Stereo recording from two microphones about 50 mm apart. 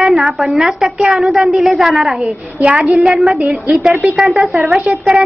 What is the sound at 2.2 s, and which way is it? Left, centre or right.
Speech, centre.